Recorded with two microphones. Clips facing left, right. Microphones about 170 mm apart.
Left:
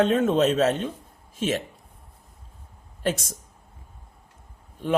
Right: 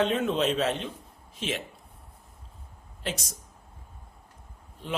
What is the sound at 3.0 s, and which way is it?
Speech, 50° left (ahead or behind).